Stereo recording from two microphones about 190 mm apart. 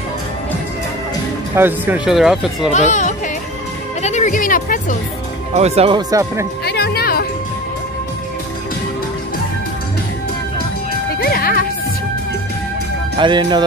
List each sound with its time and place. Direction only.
1.5 s speech: 10° right (ahead or behind)
2.7 s speech: 40° left (ahead or behind)
4.0 s music: 40° left (ahead or behind)
5.6 s speech: 30° right (ahead or behind)
6.6 s music: 60° left (ahead or behind)
11.1 s music: 55° left (ahead or behind)
13.2 s speech: 25° right (ahead or behind)